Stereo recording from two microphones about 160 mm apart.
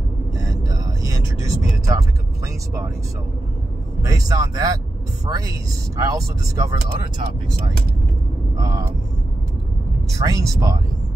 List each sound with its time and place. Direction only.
0.4 s vehicle: 20° right (ahead or behind)
2.4 s speech: 20° right (ahead or behind)
4.0 s speech: 20° right (ahead or behind)
8.5 s vehicle: 20° right (ahead or behind)
10.0 s speech: 20° right (ahead or behind)